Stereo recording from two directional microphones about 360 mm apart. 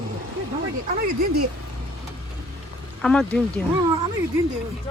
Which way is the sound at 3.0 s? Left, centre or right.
Centre.